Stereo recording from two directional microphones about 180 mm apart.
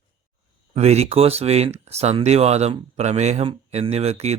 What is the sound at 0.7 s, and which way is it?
Speech, 35° right (ahead or behind).